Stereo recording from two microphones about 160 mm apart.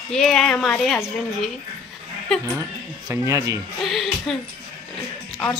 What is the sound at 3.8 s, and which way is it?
Speech, centre (ahead or behind).